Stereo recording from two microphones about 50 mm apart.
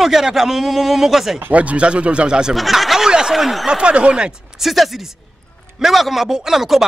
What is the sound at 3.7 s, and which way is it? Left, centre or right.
Speech, right.